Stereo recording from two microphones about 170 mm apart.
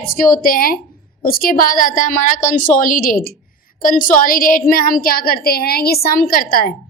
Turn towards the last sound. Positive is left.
turn(degrees=60)  # may be behind; listen again after turning